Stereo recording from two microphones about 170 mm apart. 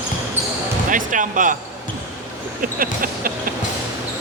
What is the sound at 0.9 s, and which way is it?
Speech, 50° right (ahead or behind).